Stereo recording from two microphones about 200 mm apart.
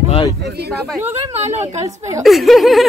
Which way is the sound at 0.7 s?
Centre (ahead or behind).